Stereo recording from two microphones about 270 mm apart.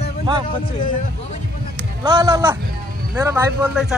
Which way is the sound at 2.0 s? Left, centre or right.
Centre.